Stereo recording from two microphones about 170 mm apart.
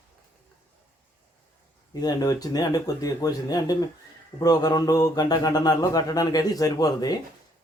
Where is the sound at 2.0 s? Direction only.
20° left (ahead or behind).